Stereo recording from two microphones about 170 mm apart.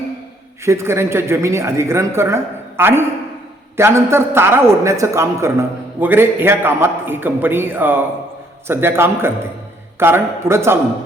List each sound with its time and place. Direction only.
0.6 s a man's voice: 15° right (ahead or behind)